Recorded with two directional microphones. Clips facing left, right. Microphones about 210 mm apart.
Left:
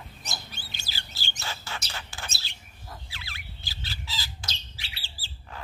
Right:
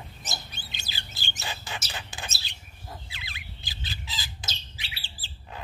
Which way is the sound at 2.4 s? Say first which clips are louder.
Right 1 dB; 20° right (ahead or behind).